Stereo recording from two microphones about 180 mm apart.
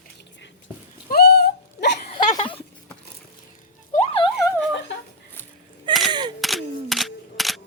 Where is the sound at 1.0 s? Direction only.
60° left (ahead or behind).